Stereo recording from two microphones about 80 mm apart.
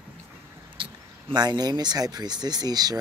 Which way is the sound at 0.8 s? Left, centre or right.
Right.